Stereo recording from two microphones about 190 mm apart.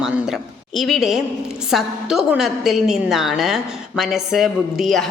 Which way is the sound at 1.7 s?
5° right (ahead or behind).